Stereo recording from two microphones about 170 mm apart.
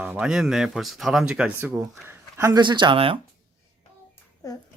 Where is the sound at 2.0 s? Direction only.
15° right (ahead or behind).